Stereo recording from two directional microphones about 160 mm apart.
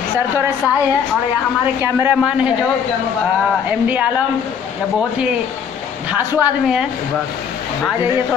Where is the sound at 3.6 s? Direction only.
10° right (ahead or behind).